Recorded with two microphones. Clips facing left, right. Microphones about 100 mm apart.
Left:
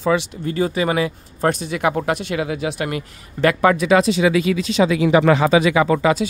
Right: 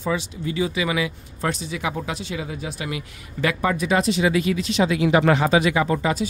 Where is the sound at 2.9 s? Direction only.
50° left (ahead or behind).